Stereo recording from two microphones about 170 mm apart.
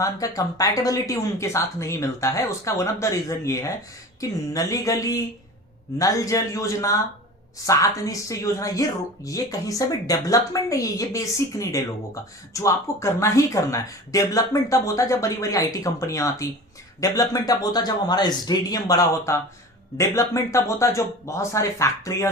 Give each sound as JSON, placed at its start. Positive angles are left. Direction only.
{"t": 0.0, "sound": "a woman's voice", "side_deg": 20}